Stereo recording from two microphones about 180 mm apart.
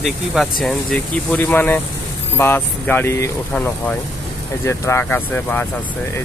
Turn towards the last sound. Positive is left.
turn(degrees=10)  # may be behind; listen again after turning